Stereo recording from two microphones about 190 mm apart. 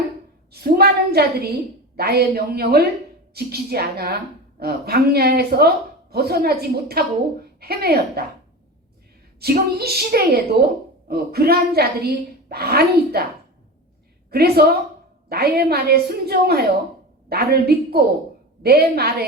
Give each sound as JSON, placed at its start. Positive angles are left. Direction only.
{"t": 0.5, "sound": "a woman's voice", "side_deg": -55}
{"t": 9.4, "sound": "a woman's voice", "side_deg": -55}
{"t": 14.3, "sound": "a woman's voice", "side_deg": -55}